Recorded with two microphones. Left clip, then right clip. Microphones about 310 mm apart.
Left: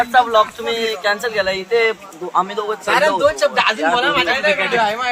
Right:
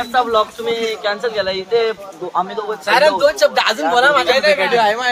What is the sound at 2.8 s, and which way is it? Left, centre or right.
Speech, right.